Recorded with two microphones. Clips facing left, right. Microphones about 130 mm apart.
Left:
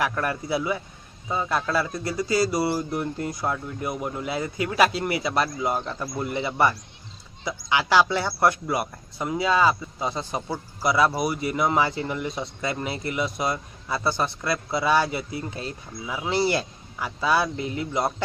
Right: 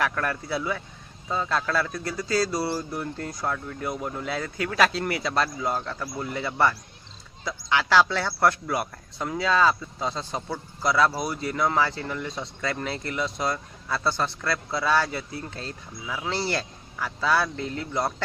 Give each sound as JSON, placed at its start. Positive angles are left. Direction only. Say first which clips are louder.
{"t": 0.0, "sound": "a man's voice", "louder": "left 1 dB", "side_deg": 15}